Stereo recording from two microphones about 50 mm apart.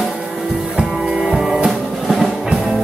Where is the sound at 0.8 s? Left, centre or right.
Centre.